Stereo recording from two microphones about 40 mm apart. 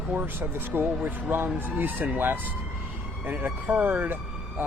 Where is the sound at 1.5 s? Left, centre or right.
Right.